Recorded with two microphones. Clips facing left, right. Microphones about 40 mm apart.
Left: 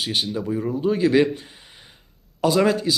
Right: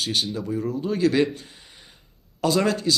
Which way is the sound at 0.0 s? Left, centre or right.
Centre.